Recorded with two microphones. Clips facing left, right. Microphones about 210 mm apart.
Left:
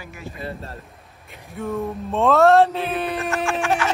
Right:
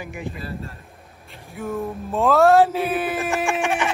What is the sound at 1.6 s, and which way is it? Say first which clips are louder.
Speech: left 1 dB; centre (ahead or behind).